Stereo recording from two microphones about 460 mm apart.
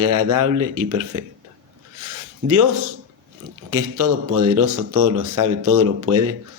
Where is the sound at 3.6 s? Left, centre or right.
Right.